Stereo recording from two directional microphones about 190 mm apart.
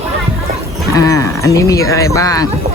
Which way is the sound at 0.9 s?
15° left (ahead or behind).